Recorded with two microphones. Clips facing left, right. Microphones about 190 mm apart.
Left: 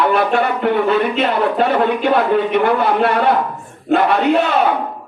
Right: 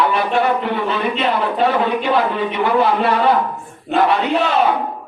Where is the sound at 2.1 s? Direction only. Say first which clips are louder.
Left 4 dB; 60° left (ahead or behind).